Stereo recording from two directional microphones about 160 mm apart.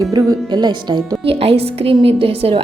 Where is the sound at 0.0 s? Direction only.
20° right (ahead or behind).